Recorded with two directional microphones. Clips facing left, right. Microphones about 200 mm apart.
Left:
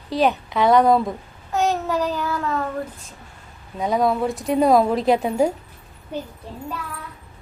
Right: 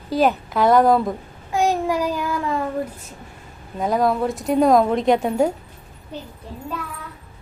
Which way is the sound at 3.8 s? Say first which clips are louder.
Right 1 dB; centre (ahead or behind).